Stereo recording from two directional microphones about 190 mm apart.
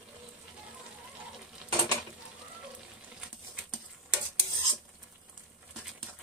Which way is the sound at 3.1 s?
5° right (ahead or behind).